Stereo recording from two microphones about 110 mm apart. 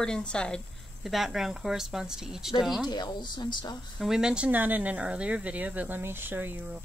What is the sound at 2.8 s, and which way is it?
Speech, 40° left (ahead or behind).